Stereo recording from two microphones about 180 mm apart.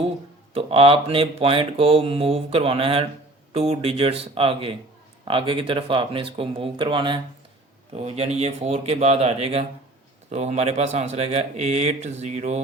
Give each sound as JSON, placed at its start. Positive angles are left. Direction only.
{"t": 0.5, "sound": "speech", "side_deg": -30}